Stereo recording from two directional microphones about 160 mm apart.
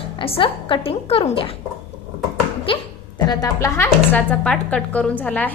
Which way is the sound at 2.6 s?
30° left (ahead or behind).